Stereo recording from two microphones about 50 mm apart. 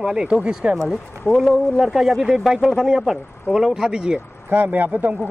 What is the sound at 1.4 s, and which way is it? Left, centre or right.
Speech, centre.